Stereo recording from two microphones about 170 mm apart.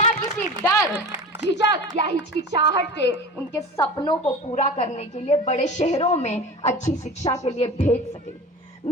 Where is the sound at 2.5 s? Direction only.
30° right (ahead or behind).